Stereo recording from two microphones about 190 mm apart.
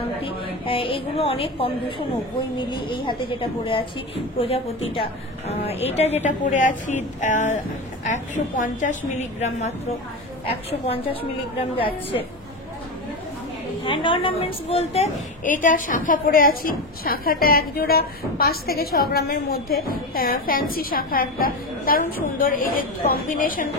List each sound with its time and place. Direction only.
0.2 s a woman's voice: 25° left (ahead or behind)
13.8 s a woman's voice: 25° left (ahead or behind); by 23.7 s 45° left (ahead or behind)